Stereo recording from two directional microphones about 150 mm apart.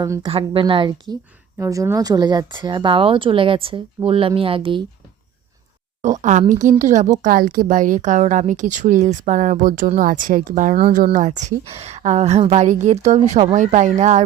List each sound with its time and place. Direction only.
0.3 s speech: 35° right (ahead or behind)
1.5 s speech: 20° right (ahead or behind); by 4.8 s 35° right (ahead or behind)
6.0 s speech: 50° right (ahead or behind); by 11.3 s 65° right (ahead or behind)
11.3 s a woman's voice: 50° right (ahead or behind)